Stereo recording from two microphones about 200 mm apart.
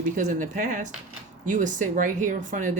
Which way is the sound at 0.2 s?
40° right (ahead or behind).